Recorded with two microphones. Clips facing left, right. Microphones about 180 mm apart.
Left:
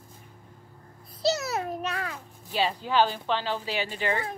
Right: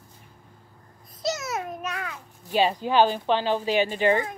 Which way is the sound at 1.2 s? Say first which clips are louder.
Left 2 dB; 35° left (ahead or behind).